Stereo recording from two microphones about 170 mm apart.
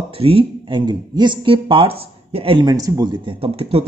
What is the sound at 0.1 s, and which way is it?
Speech, 35° right (ahead or behind).